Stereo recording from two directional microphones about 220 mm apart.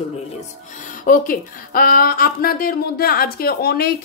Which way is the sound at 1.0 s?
40° left (ahead or behind).